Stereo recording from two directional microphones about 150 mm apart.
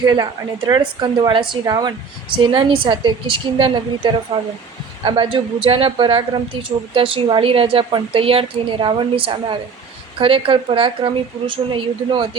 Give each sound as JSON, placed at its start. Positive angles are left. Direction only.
{"t": 0.0, "sound": "a woman's voice", "side_deg": -25}